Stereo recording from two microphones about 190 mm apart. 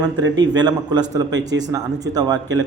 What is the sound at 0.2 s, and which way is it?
A man's voice, 20° right (ahead or behind).